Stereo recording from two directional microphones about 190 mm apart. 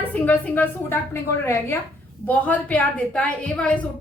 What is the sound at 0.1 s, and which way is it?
A woman's voice, 10° left (ahead or behind).